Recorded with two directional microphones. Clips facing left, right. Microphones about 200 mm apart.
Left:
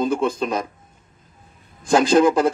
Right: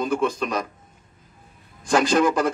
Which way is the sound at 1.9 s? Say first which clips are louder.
Left 4 dB; 25° left (ahead or behind).